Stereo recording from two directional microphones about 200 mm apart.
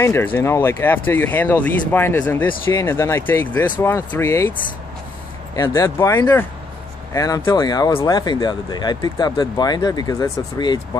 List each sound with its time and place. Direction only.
0.0 s speech: 10° left (ahead or behind)